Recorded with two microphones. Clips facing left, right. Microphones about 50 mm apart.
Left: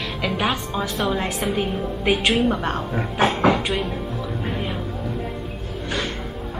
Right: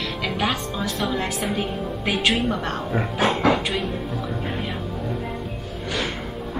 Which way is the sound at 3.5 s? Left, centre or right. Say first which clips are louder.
Left 1 dB; centre.